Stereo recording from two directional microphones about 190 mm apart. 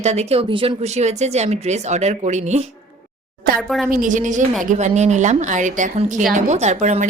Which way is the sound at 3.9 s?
45° right (ahead or behind).